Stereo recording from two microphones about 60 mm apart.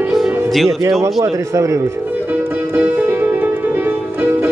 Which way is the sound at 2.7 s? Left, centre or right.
Right.